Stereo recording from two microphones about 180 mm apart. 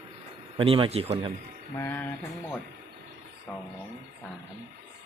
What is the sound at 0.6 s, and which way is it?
Speech, 30° right (ahead or behind).